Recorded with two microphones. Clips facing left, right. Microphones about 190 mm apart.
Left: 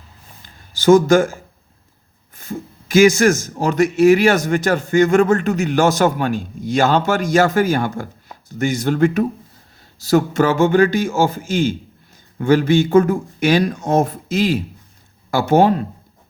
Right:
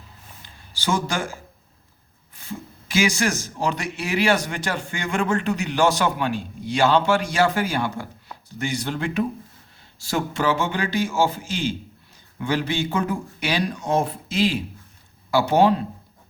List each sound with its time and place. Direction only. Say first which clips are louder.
0.4 s speech: left 14 dB; 45° left (ahead or behind)